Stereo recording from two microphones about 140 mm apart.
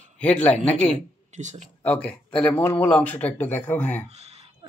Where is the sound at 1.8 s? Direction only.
10° left (ahead or behind).